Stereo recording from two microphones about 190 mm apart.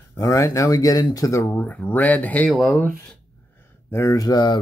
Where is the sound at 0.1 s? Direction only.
15° left (ahead or behind).